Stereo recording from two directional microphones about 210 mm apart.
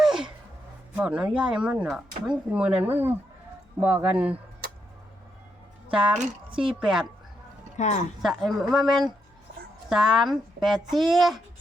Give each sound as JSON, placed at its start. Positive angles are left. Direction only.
{"t": 0.0, "sound": "a sound", "side_deg": 0}
{"t": 0.9, "sound": "a man's voice", "side_deg": -5}
{"t": 5.9, "sound": "speech", "side_deg": -5}
{"t": 7.8, "sound": "speech", "side_deg": 35}
{"t": 8.2, "sound": "speech", "side_deg": 0}